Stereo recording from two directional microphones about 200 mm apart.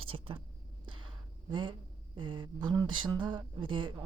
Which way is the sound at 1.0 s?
25° right (ahead or behind).